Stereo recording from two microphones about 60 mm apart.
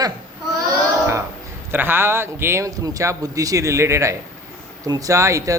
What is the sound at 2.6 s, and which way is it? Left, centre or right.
Speech, right.